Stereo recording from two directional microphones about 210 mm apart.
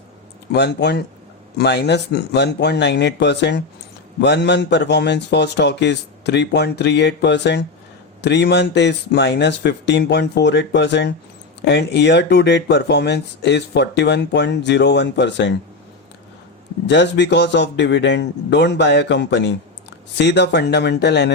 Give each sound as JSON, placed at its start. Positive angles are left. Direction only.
{"t": 0.5, "sound": "speech", "side_deg": 55}
{"t": 16.8, "sound": "speech", "side_deg": 55}